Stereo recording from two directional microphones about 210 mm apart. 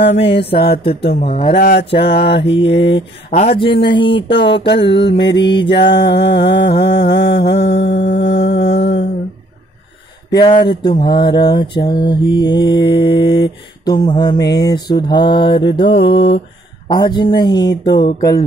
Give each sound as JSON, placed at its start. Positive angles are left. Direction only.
{"t": 0.6, "sound": "mantra", "side_deg": 50}
{"t": 1.3, "sound": "mantra", "side_deg": 40}
{"t": 2.7, "sound": "a sound", "side_deg": 55}
{"t": 3.3, "sound": "mantra", "side_deg": 30}
{"t": 4.3, "sound": "a sound", "side_deg": 55}
{"t": 8.7, "sound": "mantra", "side_deg": 55}
{"t": 10.6, "sound": "mantra", "side_deg": 20}